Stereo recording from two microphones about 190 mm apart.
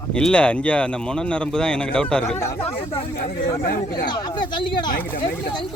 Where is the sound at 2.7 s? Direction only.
30° left (ahead or behind).